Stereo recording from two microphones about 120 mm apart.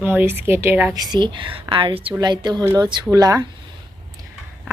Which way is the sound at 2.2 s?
35° right (ahead or behind).